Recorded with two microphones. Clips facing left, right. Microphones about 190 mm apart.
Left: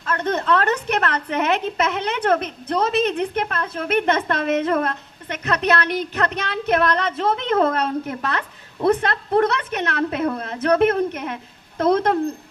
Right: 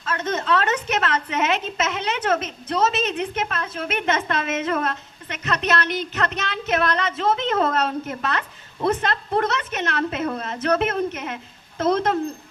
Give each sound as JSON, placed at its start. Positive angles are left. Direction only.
{"t": 0.0, "sound": "a woman's voice", "side_deg": 60}